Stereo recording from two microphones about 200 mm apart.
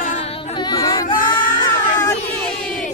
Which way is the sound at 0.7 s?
20° left (ahead or behind).